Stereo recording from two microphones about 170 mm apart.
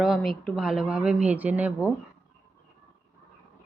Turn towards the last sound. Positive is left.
turn(degrees=-10)  # may be behind; listen again after turning